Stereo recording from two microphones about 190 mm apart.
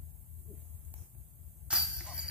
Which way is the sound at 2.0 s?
5° right (ahead or behind).